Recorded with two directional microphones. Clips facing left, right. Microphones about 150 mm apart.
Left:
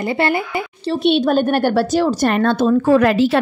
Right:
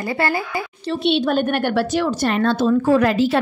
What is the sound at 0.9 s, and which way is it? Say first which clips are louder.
A woman's voice: left 3 dB; 40° left (ahead or behind).